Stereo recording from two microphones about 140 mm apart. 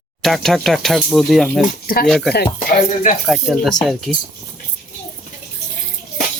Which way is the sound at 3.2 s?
Centre (ahead or behind).